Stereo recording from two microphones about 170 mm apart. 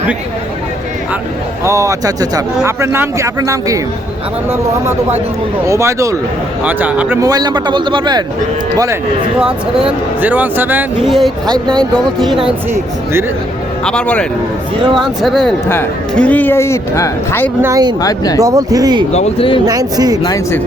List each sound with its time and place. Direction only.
1.6 s speech: 20° right (ahead or behind)
7.3 s a man's voice: 25° right (ahead or behind)
9.4 s speech: 5° right (ahead or behind)
13.8 s speech: 5° left (ahead or behind)
17.6 s a man's voice: 20° right (ahead or behind)
19.1 s speech: 35° left (ahead or behind)
19.6 s a man's voice: 20° right (ahead or behind)
20.2 s speech: 20° left (ahead or behind)